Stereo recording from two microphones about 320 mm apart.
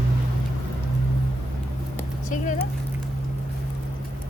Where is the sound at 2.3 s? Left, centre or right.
Left.